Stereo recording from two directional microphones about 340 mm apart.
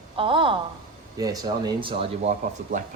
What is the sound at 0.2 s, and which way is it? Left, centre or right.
Speech, centre.